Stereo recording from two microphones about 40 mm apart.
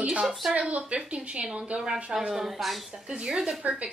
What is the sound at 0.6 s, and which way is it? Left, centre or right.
A woman's voice, right.